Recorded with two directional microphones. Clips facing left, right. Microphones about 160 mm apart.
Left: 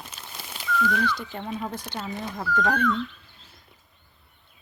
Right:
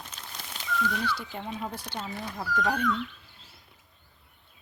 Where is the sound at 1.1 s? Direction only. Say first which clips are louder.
Left 3 dB; 5° right (ahead or behind).